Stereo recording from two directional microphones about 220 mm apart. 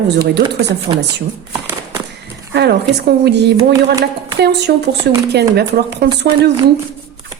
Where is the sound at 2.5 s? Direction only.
50° right (ahead or behind).